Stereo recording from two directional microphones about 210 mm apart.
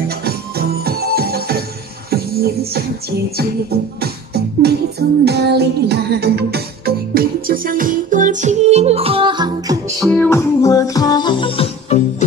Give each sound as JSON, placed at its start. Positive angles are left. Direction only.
{"t": 0.2, "sound": "music", "side_deg": -45}
{"t": 4.0, "sound": "music", "side_deg": -50}
{"t": 10.0, "sound": "music", "side_deg": 5}